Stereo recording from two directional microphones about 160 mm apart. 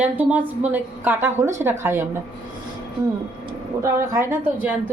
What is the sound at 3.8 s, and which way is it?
Speech, 20° right (ahead or behind).